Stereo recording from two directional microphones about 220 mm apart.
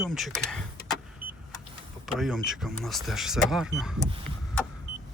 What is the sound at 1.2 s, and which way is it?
Car, 40° right (ahead or behind).